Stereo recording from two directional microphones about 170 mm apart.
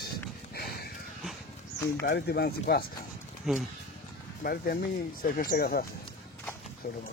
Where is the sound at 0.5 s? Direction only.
65° left (ahead or behind).